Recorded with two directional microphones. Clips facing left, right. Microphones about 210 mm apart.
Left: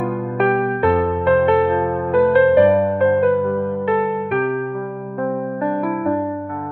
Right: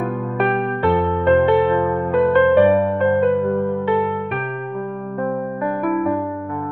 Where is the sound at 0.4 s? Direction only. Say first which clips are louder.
Left 3 dB; centre (ahead or behind).